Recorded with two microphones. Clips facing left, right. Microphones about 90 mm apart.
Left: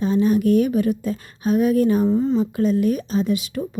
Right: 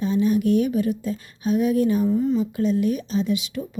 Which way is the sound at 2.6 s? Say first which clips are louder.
Left 2 dB; 50° left (ahead or behind).